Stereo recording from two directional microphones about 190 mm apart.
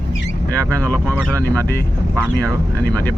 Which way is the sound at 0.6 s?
10° left (ahead or behind).